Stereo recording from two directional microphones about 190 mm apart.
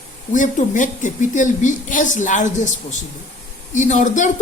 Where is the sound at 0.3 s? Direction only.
40° left (ahead or behind).